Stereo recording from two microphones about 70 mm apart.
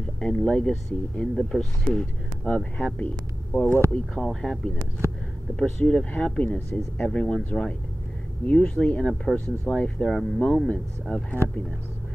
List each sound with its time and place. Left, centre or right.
0.2 s speech: centre
2.4 s speech: centre
3.9 s speech: centre
11.4 s speech: right